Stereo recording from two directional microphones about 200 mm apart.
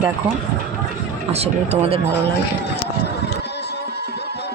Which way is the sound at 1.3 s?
30° right (ahead or behind).